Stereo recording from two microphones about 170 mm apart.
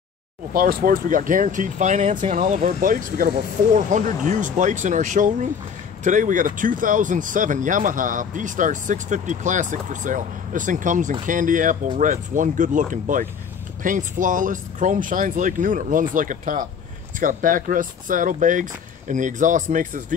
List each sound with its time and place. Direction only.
0.5 s speech: 55° right (ahead or behind)